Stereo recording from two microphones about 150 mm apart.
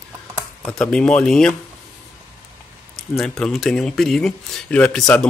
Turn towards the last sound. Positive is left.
turn(degrees=5)  # may be behind; listen again after turning